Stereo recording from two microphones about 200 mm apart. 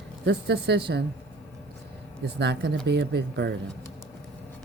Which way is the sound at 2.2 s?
60° right (ahead or behind).